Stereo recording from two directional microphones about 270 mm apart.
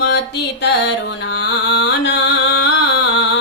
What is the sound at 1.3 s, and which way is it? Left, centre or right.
Music, left.